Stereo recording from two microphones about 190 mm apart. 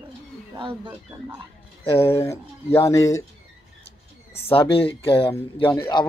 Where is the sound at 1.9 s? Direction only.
15° left (ahead or behind).